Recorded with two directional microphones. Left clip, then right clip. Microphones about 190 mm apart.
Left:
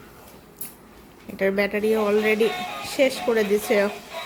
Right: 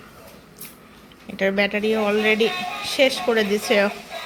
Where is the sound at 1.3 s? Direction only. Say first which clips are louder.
Right 2 dB; 15° left (ahead or behind).